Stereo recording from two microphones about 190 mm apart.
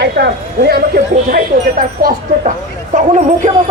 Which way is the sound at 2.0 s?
50° right (ahead or behind).